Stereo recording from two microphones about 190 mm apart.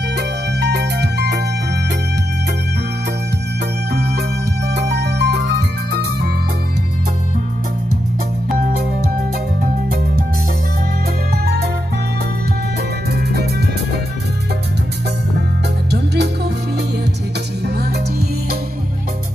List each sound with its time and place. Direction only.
0.1 s music: 60° right (ahead or behind)
3.9 s music: 60° right (ahead or behind)
9.6 s music: 50° right (ahead or behind)
11.4 s music: 55° right (ahead or behind)
13.1 s music: 60° right (ahead or behind)
15.9 s music: 60° right (ahead or behind)